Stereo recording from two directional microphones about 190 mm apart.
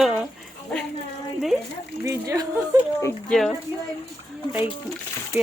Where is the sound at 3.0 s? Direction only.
5° left (ahead or behind).